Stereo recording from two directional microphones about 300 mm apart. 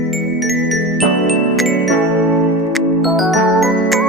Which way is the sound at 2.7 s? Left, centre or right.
Centre.